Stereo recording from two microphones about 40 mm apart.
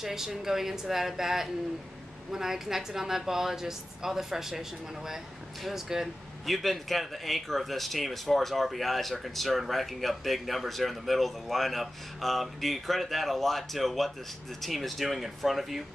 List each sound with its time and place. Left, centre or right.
0.0 s a woman's voice: centre